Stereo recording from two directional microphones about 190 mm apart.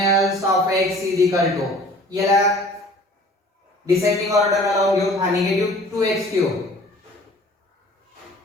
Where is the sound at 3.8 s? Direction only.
15° right (ahead or behind).